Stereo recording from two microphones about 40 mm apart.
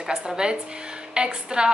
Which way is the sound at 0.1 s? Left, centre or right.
Centre.